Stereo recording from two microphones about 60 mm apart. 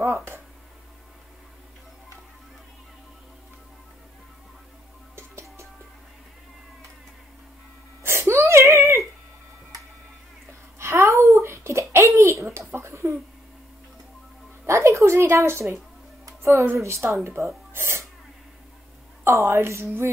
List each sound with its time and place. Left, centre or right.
0.1 s a woman's voice: right
5.1 s music: right
8.0 s whimper: right
10.8 s a sound: right
14.7 s music: right
15.3 s a woman's voice: right
16.3 s music: right
16.7 s speech: right
19.2 s a woman's voice: right